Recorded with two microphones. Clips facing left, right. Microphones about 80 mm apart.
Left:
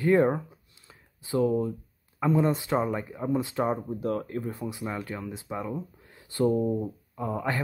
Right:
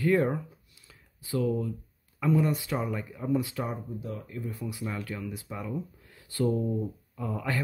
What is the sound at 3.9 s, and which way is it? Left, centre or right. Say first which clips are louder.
Speech: left 8 dB; left.